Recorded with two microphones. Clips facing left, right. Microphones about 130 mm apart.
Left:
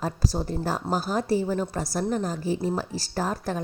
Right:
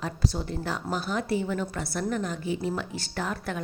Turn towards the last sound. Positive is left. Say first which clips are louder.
# left 4 dB
turn(degrees=35)  # may be behind; listen again after turning